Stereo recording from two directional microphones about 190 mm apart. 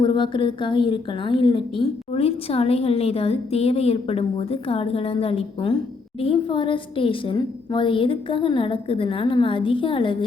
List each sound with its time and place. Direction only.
0.0 s a woman's voice: 25° left (ahead or behind)